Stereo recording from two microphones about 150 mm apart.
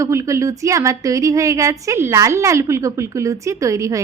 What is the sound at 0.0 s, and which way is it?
Speech, 20° right (ahead or behind).